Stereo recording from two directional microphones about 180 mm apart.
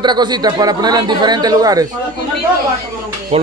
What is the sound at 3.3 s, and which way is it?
Speech, 35° right (ahead or behind).